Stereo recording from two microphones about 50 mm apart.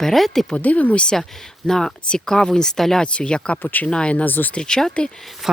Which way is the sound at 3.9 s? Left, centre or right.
Left.